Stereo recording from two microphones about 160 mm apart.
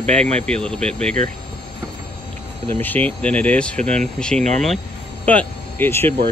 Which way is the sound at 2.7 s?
10° left (ahead or behind).